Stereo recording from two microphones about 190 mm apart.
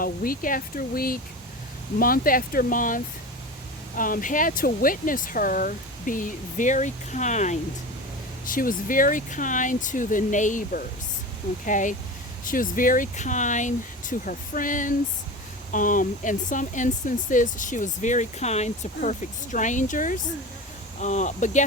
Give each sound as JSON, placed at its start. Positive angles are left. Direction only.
{"t": 0.0, "sound": "speech", "side_deg": 50}